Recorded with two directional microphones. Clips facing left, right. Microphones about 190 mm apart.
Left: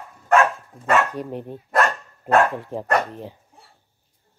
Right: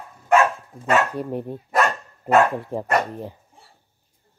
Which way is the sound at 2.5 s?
15° right (ahead or behind).